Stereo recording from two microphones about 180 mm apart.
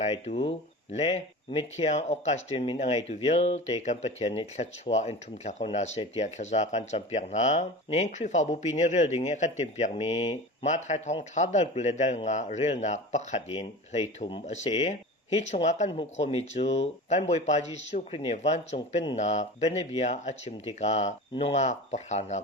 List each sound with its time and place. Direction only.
0.0 s speech: 40° left (ahead or behind)
14.4 s speech: 40° left (ahead or behind)